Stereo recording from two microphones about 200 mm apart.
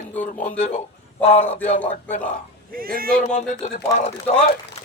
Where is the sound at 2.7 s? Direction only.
45° right (ahead or behind).